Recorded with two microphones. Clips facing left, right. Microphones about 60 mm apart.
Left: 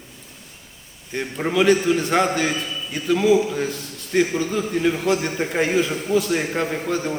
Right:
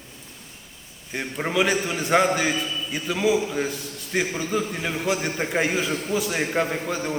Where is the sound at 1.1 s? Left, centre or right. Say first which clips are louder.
Left 3 dB; centre.